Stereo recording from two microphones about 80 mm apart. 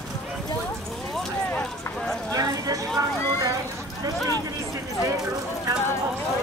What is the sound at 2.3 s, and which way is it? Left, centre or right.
Clip-clop, right.